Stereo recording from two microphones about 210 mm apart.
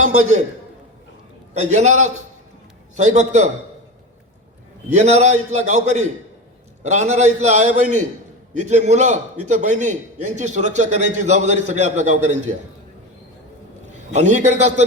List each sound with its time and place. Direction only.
0.1 s a man's voice: 35° right (ahead or behind)
1.5 s a man's voice: 35° right (ahead or behind)
4.9 s a man's voice: 35° right (ahead or behind)
13.9 s a man's voice: 35° right (ahead or behind)